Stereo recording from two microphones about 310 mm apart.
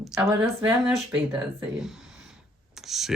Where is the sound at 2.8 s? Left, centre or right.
Centre.